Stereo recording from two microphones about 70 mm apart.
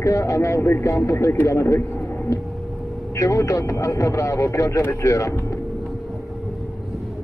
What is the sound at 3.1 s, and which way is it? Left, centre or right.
Speech, left.